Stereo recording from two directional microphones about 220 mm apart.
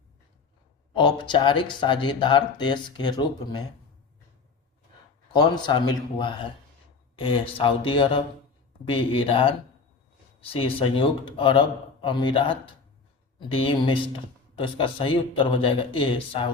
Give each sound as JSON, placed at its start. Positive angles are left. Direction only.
{"t": 0.9, "sound": "speech", "side_deg": 20}
{"t": 5.3, "sound": "speech", "side_deg": 20}